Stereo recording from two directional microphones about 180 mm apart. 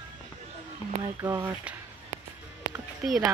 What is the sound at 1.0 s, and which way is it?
Speech, 20° right (ahead or behind).